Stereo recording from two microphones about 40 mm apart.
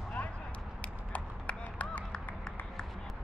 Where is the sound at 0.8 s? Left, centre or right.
Left.